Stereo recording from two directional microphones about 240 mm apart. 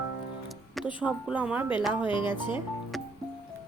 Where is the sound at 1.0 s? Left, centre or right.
Centre.